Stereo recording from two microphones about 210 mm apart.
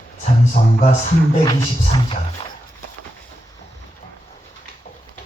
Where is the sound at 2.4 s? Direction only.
25° left (ahead or behind).